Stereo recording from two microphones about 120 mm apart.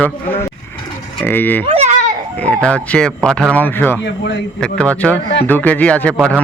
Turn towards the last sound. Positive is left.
turn(degrees=10)  # may be behind; listen again after turning